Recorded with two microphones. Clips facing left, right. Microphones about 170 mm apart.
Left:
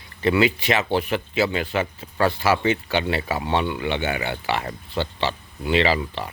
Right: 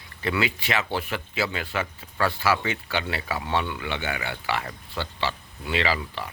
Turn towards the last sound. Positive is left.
turn(degrees=25)  # may be behind; listen again after turning